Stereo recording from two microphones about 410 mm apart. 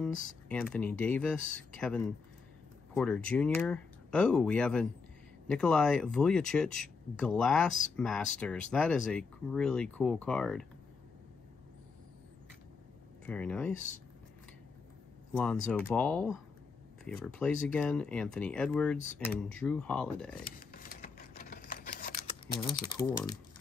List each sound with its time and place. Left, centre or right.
0.5 s speech: centre
13.2 s speech: centre
15.3 s speech: centre
20.5 s camera: left
22.5 s speech: centre